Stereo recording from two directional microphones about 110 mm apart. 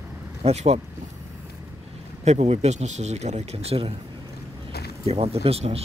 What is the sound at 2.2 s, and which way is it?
Speech, 85° right.